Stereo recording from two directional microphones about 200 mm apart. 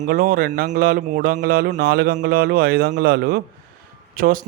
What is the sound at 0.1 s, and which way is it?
Speech, 45° right (ahead or behind).